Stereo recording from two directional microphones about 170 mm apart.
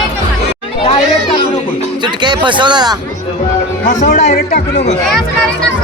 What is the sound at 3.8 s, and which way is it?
Speech, 45° left (ahead or behind).